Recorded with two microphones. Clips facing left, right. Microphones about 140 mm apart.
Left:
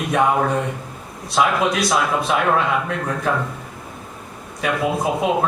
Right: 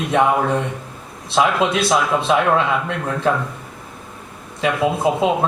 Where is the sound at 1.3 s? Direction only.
25° right (ahead or behind).